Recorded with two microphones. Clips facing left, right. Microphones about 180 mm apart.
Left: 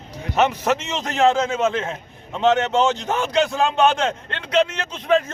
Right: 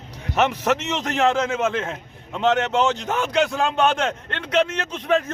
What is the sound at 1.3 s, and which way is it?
A man's voice, 20° left (ahead or behind).